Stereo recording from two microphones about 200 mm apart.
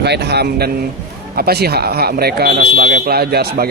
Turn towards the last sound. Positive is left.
turn(degrees=-50)  # may be behind; listen again after turning